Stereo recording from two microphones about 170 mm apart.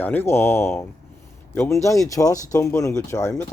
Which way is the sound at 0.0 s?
10° left (ahead or behind).